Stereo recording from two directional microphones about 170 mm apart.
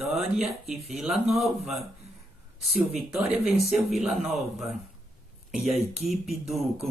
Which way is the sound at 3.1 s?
5° right (ahead or behind).